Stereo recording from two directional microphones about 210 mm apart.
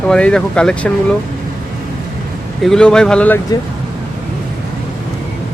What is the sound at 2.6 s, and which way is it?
Speech, 5° left (ahead or behind).